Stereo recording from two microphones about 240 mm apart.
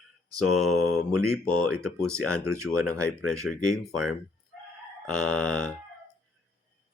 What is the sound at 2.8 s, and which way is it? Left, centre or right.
Speech, centre.